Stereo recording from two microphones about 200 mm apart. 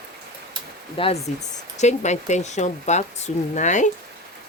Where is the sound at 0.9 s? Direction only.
30° left (ahead or behind).